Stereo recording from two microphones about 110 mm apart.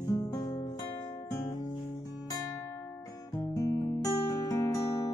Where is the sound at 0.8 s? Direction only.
35° left (ahead or behind).